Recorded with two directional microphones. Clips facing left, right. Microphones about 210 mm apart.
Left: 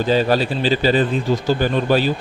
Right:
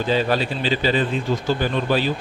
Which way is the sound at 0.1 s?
40° left (ahead or behind).